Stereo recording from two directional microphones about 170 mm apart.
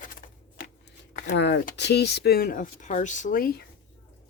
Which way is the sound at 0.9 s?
90° left.